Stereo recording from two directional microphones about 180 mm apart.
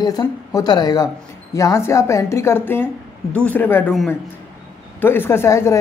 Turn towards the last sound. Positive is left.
turn(degrees=15)  # may be behind; listen again after turning